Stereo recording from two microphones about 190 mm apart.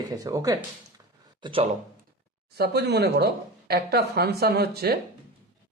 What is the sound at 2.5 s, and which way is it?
Speech, 60° right (ahead or behind).